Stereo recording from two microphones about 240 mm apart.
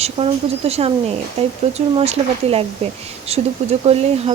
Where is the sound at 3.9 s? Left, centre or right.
Right.